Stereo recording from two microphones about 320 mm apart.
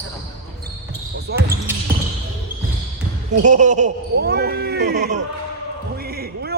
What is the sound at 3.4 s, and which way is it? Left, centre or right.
Speech, right.